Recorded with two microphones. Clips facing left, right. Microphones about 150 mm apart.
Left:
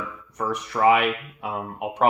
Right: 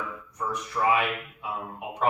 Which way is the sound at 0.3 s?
75° left (ahead or behind).